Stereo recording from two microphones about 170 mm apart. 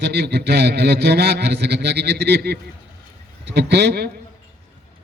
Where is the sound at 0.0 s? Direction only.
75° right (ahead or behind).